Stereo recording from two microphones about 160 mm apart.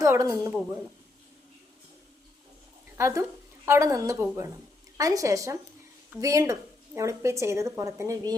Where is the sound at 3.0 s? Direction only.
20° right (ahead or behind).